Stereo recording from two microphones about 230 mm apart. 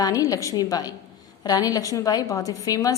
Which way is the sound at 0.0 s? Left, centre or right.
Centre.